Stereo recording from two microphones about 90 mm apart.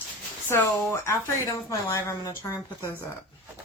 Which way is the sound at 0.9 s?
30° left (ahead or behind).